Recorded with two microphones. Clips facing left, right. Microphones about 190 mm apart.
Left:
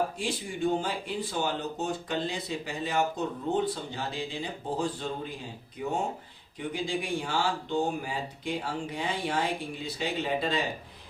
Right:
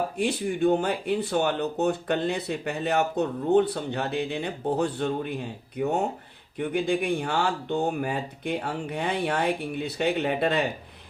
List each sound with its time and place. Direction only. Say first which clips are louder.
0.2 s speech: right 7 dB; 60° right (ahead or behind)